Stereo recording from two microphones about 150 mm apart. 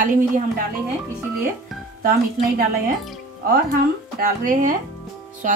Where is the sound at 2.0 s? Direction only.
70° right (ahead or behind).